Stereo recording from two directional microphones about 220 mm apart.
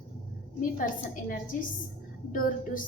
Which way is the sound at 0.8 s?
40° left (ahead or behind).